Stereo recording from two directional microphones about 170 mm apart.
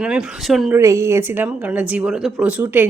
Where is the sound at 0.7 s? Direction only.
15° right (ahead or behind).